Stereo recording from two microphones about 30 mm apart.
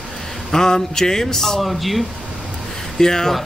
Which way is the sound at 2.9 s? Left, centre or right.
Centre.